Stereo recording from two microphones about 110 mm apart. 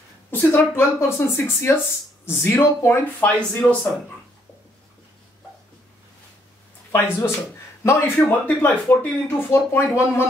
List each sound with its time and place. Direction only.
0.3 s speech: 20° left (ahead or behind)
6.9 s speech: 25° left (ahead or behind)